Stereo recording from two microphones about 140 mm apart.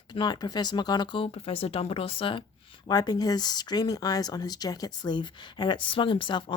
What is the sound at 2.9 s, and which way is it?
Speech, 30° left (ahead or behind).